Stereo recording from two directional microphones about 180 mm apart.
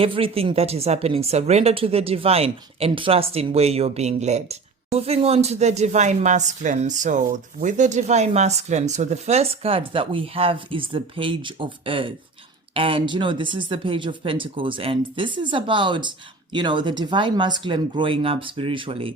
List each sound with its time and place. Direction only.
0.0 s a woman's voice: 30° right (ahead or behind)